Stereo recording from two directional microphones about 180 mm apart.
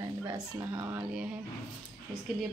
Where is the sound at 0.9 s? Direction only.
5° right (ahead or behind).